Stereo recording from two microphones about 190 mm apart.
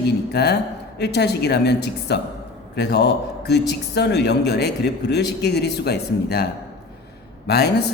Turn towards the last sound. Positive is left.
turn(degrees=60)  # may be behind; listen again after turning